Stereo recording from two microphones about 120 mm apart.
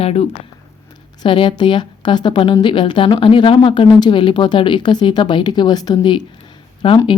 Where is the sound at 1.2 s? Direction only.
40° left (ahead or behind).